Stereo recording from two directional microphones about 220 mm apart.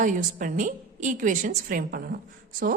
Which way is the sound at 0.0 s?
35° right (ahead or behind).